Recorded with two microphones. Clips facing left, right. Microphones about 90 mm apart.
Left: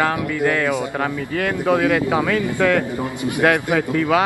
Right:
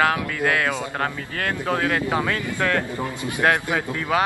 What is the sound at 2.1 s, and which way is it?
Speech, 20° left (ahead or behind).